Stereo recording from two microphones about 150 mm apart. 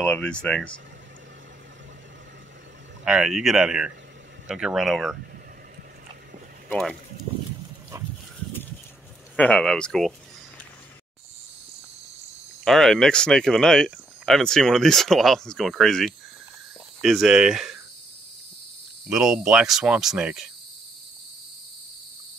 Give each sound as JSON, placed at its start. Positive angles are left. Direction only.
{"t": 0.0, "sound": "speech", "side_deg": 5}
{"t": 3.1, "sound": "speech", "side_deg": -5}
{"t": 6.7, "sound": "speech", "side_deg": 10}
{"t": 7.9, "sound": "dog", "side_deg": -20}
{"t": 9.4, "sound": "speech", "side_deg": 5}
{"t": 12.6, "sound": "speech", "side_deg": 0}
{"t": 19.0, "sound": "speech", "side_deg": -5}